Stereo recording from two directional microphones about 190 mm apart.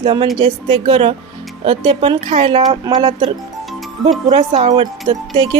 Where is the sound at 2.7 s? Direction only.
20° right (ahead or behind).